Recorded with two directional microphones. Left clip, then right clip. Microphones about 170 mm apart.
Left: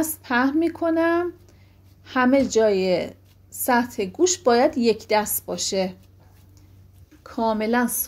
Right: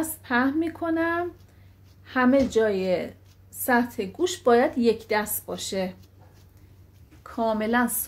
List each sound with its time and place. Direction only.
0.0 s a woman's voice: 35° left (ahead or behind)
7.2 s a woman's voice: 20° left (ahead or behind)